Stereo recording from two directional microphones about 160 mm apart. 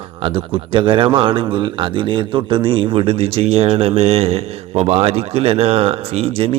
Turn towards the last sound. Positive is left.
turn(degrees=-35)  # may be behind; listen again after turning